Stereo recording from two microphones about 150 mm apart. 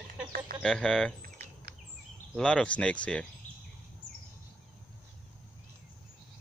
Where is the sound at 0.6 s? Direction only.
5° left (ahead or behind).